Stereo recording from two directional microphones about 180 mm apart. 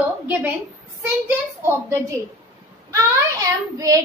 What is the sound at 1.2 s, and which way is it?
Speech, 15° right (ahead or behind).